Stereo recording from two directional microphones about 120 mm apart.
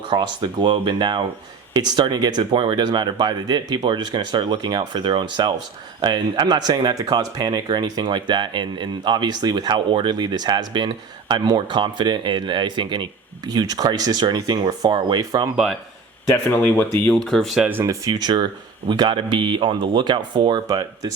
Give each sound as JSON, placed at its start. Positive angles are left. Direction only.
{"t": 0.1, "sound": "speech", "side_deg": -40}
{"t": 16.3, "sound": "speech", "side_deg": 20}
{"t": 17.2, "sound": "speech", "side_deg": 0}
{"t": 17.6, "sound": "speech", "side_deg": -15}
{"t": 17.8, "sound": "speech", "side_deg": -30}